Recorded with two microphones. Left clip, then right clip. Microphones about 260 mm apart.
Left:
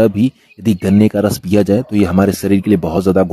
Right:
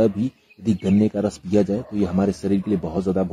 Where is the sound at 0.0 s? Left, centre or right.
Left.